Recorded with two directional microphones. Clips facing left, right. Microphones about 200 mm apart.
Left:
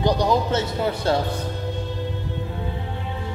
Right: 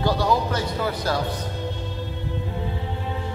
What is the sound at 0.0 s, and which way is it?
Speech, 20° left (ahead or behind).